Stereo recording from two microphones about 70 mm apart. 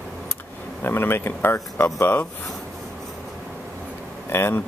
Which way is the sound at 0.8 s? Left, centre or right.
Left.